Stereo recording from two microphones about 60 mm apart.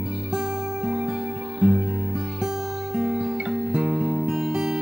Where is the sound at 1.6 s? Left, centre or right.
Centre.